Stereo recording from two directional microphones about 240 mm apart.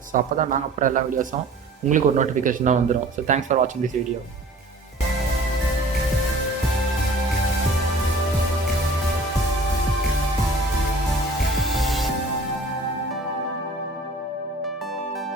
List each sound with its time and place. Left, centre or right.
0.1 s speech: right
11.8 s music: centre